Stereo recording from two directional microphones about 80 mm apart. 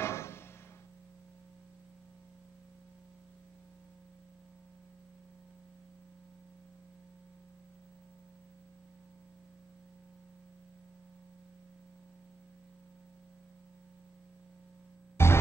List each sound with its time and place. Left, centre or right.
0.0 s music: left
15.2 s music: left